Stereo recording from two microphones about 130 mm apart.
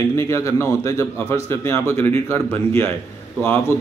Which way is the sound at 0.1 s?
25° left (ahead or behind).